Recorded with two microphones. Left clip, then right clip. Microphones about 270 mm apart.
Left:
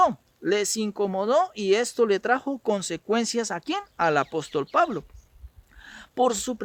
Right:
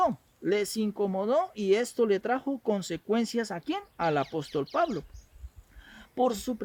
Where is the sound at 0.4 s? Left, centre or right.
Left.